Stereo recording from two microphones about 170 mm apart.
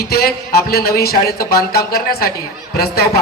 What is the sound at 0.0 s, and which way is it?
A man's voice, 65° left (ahead or behind).